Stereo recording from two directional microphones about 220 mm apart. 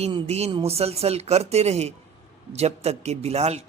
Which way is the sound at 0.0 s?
30° right (ahead or behind).